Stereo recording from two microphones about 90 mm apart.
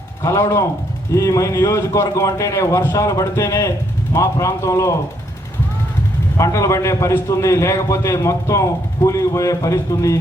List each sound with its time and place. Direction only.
0.2 s a man's voice: 35° left (ahead or behind)
6.3 s a man's voice: 35° left (ahead or behind)